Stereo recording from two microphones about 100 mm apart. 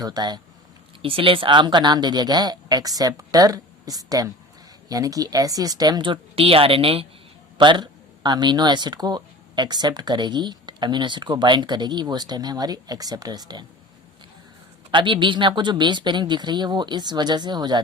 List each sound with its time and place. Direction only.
0.0 s speech: 45° right (ahead or behind)
1.0 s speech: 65° right (ahead or behind)
7.6 s speech: 50° right (ahead or behind)
14.8 s speech: 55° right (ahead or behind)